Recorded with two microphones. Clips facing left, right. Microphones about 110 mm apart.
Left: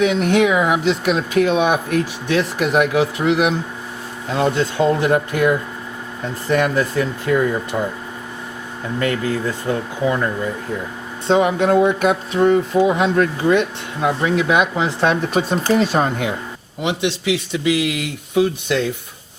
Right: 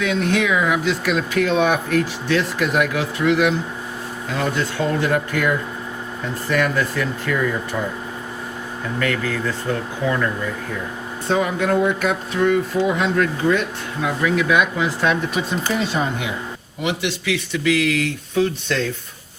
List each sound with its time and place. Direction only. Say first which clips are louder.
0.0 s speech: left 4 dB; 20° left (ahead or behind)
9.0 s speech: left 3 dB; 25° left (ahead or behind)
15.1 s speech: left 3 dB; 40° left (ahead or behind)
16.8 s speech: left 3 dB; 20° left (ahead or behind)